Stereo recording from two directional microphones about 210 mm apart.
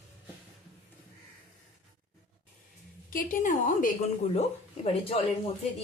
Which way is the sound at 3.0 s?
40° left (ahead or behind).